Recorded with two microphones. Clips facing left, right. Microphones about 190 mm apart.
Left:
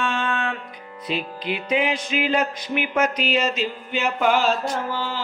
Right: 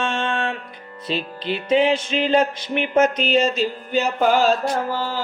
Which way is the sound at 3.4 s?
30° right (ahead or behind).